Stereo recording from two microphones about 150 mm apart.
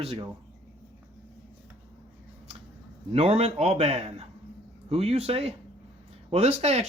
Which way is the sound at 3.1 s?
45° right (ahead or behind).